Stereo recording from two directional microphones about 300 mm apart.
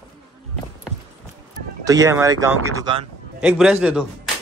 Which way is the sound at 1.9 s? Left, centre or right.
Centre.